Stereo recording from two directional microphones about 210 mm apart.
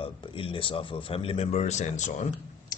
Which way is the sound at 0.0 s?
25° left (ahead or behind).